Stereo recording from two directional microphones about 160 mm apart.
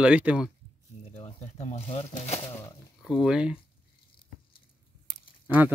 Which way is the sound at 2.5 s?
20° left (ahead or behind).